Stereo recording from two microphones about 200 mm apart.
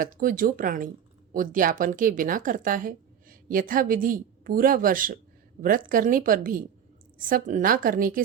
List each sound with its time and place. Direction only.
0.0 s a woman's voice: 45° right (ahead or behind)